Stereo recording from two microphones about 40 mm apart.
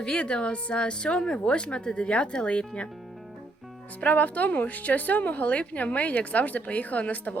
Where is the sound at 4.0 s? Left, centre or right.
Left.